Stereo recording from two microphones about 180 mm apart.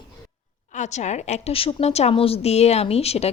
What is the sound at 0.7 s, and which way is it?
Speech, 40° left (ahead or behind).